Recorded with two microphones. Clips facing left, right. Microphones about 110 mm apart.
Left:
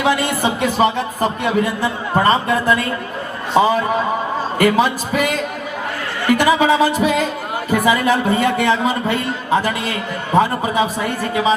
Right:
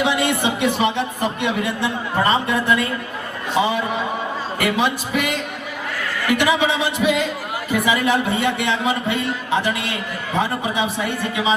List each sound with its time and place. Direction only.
0.0 s a man's voice: 40° left (ahead or behind)
3.6 s speech: 40° left (ahead or behind)
6.2 s speech: 40° left (ahead or behind)